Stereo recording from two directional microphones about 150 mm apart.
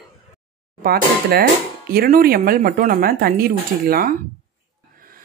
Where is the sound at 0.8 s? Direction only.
90° right.